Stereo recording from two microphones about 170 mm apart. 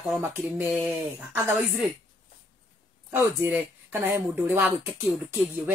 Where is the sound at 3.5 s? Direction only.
10° right (ahead or behind).